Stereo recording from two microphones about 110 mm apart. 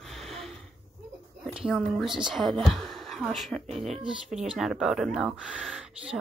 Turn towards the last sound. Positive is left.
turn(degrees=-5)  # may be behind; listen again after turning